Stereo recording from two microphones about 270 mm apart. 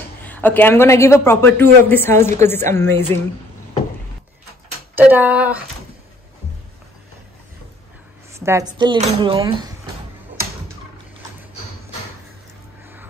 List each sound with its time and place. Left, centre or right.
0.2 s a woman's voice: centre
4.9 s speech: centre
8.3 s speech: centre